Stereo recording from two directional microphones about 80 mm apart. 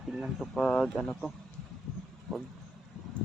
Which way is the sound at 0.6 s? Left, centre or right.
Centre.